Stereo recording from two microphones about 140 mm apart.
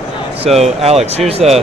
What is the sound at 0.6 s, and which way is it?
Speech, 50° right (ahead or behind).